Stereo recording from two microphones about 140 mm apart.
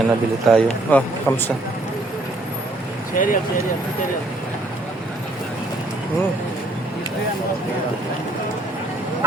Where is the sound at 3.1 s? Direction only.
75° left (ahead or behind).